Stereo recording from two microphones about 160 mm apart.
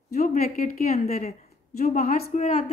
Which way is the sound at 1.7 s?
50° left (ahead or behind).